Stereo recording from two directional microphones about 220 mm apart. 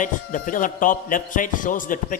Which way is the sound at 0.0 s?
35° left (ahead or behind).